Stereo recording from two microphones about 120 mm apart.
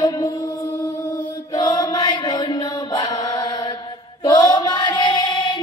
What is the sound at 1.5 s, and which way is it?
Chant, 35° left (ahead or behind).